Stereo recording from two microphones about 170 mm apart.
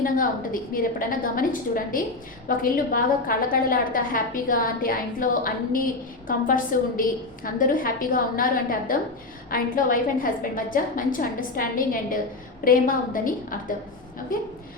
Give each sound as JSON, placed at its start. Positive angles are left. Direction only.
{"t": 0.0, "sound": "a woman's voice", "side_deg": 55}
{"t": 9.5, "sound": "a woman's voice", "side_deg": 55}